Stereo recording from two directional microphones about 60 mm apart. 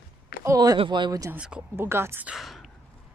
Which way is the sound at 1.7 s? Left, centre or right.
Right.